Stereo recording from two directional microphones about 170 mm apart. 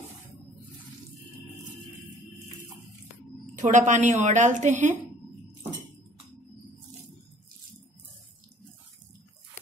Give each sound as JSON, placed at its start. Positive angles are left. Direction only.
{"t": 3.5, "sound": "a woman's voice", "side_deg": -45}